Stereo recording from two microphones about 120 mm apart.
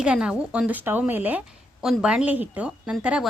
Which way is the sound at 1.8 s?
5° right (ahead or behind).